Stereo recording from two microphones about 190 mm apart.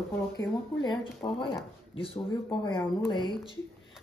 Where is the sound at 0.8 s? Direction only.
25° left (ahead or behind).